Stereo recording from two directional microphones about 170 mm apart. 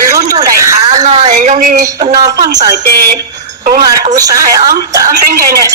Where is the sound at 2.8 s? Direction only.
65° right (ahead or behind).